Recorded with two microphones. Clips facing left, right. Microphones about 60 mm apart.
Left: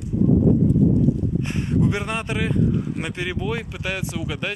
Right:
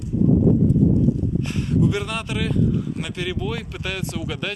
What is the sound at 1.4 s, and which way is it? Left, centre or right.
Speech, left.